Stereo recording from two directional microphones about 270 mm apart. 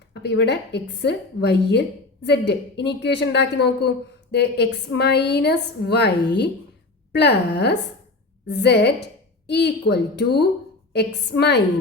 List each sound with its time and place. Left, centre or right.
0.1 s a woman's voice: left